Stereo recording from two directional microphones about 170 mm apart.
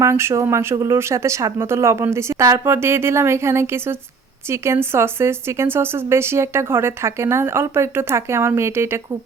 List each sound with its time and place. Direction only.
0.0 s speech: 15° right (ahead or behind)